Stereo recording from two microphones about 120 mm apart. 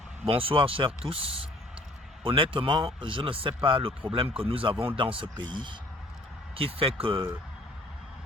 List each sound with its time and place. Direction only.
0.3 s speech: 50° right (ahead or behind)
6.7 s speech: 45° right (ahead or behind)